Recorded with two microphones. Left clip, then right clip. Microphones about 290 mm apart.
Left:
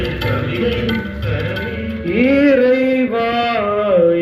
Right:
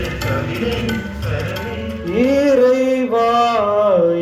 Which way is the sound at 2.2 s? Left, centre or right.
Centre.